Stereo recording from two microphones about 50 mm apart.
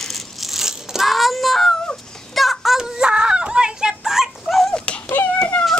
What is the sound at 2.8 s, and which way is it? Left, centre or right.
Dog, centre.